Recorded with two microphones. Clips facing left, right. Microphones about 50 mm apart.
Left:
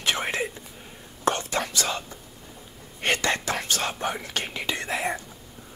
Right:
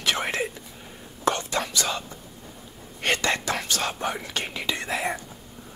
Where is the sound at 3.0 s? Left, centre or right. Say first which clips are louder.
Even; left.